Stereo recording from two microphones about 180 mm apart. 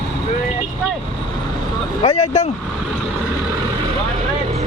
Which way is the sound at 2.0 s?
35° left (ahead or behind).